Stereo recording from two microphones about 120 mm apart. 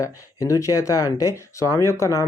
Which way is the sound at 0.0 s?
30° left (ahead or behind).